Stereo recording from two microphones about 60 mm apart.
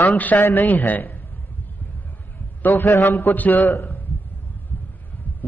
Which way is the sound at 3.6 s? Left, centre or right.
Left.